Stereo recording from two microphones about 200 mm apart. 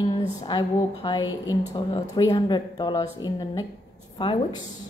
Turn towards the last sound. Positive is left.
turn(degrees=25)  # may be behind; listen again after turning